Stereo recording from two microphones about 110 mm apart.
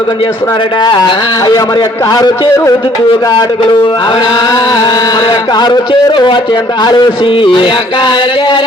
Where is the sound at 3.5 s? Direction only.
45° left (ahead or behind).